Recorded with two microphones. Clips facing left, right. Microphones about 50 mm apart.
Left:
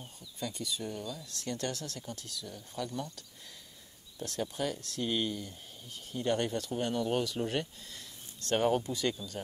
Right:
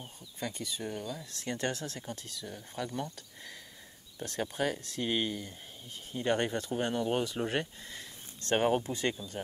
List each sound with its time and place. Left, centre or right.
0.0 s speech: right